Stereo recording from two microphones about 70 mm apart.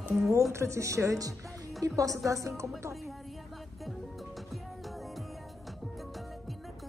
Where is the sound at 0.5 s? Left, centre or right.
Right.